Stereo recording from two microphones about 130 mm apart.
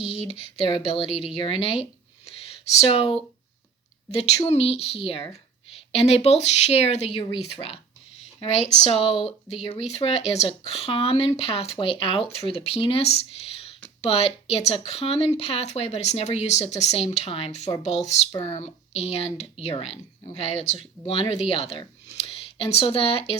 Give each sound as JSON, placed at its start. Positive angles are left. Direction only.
{"t": 0.7, "sound": "speech", "side_deg": 45}
{"t": 2.8, "sound": "speech", "side_deg": 45}
{"t": 4.4, "sound": "speech", "side_deg": 50}
{"t": 8.4, "sound": "speech", "side_deg": 55}